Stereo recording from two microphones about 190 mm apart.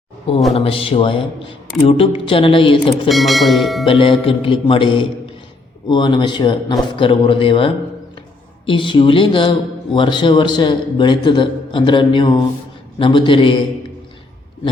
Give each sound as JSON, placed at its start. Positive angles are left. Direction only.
{"t": 0.5, "sound": "a man's voice", "side_deg": 30}
{"t": 3.1, "sound": "speech", "side_deg": 0}
{"t": 3.8, "sound": "a man's voice", "side_deg": 30}